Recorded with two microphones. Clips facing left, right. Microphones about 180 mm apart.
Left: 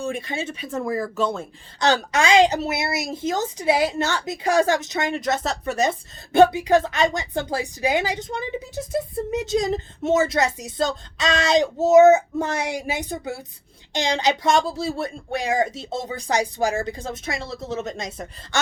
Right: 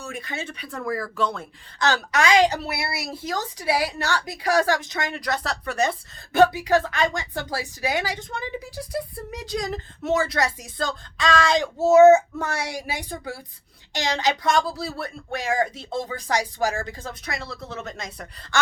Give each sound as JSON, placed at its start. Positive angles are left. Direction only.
{"t": 0.0, "sound": "speech", "side_deg": 25}